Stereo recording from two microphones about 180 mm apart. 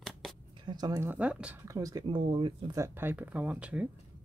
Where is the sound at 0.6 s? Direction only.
20° right (ahead or behind).